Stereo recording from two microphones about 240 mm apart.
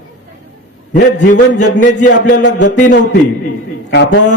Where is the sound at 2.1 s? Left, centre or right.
Left.